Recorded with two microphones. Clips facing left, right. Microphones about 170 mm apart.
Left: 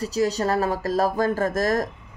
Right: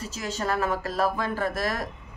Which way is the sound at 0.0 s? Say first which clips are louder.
Left 8 dB; 35° left (ahead or behind).